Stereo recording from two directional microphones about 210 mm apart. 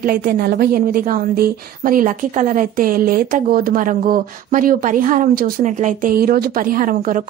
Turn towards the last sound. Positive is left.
turn(degrees=-40)  # may be behind; listen again after turning